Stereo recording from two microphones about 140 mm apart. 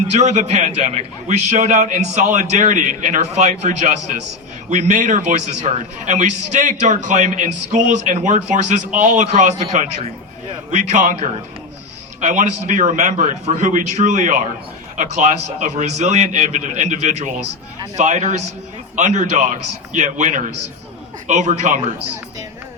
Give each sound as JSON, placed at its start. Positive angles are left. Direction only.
{"t": 0.1, "sound": "a man's voice", "side_deg": -55}